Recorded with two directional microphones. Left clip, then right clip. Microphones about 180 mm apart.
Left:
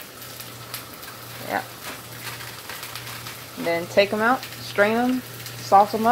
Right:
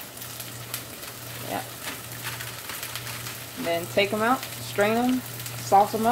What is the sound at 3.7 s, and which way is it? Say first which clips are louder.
Speech: left 4 dB; 20° left (ahead or behind).